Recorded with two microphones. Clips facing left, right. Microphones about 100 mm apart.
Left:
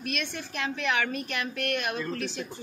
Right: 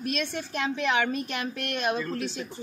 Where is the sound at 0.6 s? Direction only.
20° right (ahead or behind).